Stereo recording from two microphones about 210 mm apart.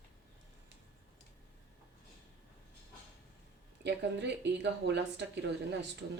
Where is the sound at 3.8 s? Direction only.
55° right (ahead or behind).